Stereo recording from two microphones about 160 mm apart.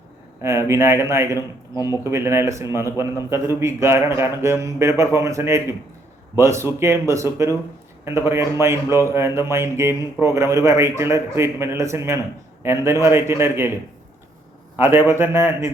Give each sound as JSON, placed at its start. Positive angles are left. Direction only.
{"t": 0.4, "sound": "speech", "side_deg": -15}
{"t": 14.8, "sound": "speech", "side_deg": -15}